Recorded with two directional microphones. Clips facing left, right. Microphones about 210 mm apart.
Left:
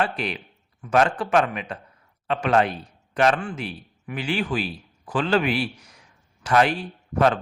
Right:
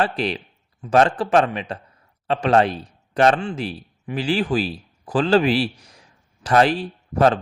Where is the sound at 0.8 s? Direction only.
30° right (ahead or behind).